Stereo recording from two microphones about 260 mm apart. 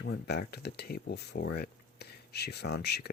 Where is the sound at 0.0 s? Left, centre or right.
Left.